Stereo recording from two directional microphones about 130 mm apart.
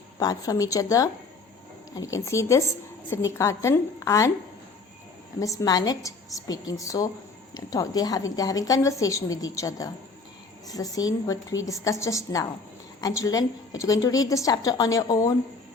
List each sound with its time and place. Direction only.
0.2 s a woman's voice: 30° left (ahead or behind)
5.4 s a woman's voice: 25° left (ahead or behind)